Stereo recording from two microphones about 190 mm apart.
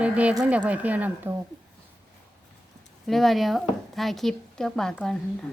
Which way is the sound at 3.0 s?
Centre (ahead or behind).